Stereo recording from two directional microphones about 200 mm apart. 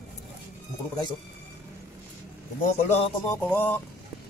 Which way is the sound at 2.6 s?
35° left (ahead or behind).